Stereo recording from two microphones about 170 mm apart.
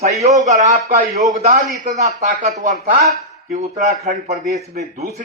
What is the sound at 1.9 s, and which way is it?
Speech, 45° right (ahead or behind).